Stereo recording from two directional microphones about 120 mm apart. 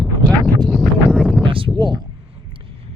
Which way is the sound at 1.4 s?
45° right (ahead or behind).